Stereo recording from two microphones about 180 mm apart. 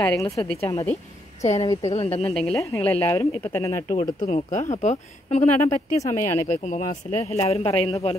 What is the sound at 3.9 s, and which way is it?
Speech, 40° left (ahead or behind).